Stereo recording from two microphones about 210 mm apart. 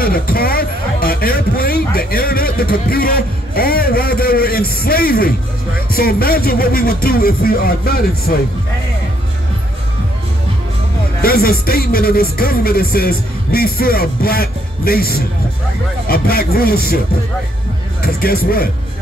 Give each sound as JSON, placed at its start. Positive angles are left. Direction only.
{"t": 0.0, "sound": "a man's voice", "side_deg": 45}
{"t": 11.1, "sound": "speech", "side_deg": 45}
{"t": 18.0, "sound": "speech", "side_deg": 45}